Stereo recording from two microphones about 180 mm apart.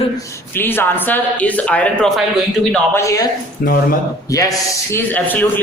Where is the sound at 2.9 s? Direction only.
20° left (ahead or behind).